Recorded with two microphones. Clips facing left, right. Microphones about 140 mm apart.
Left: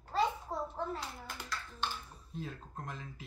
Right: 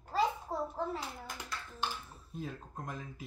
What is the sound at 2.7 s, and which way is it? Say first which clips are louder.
Speech: right 2 dB; 10° right (ahead or behind).